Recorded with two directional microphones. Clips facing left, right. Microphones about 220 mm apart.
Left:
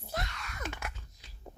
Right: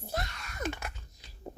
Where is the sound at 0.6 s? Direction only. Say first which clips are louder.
Right 6 dB; 35° right (ahead or behind).